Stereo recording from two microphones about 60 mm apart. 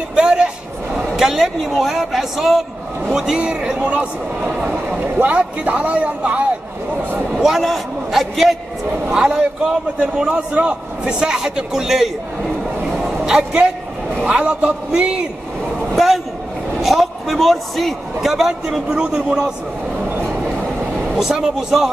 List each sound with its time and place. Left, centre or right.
0.1 s a man's voice: centre
3.1 s a man's voice: centre
7.3 s a man's voice: centre
9.1 s a man's voice: centre
12.9 s a sound: centre
14.2 s a man's voice: right
16.8 s a man's voice: centre
21.2 s a man's voice: centre